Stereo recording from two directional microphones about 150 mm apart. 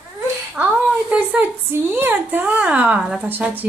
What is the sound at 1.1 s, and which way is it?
A woman's voice, 10° right (ahead or behind).